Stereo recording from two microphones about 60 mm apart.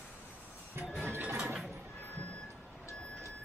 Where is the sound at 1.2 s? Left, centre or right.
Right.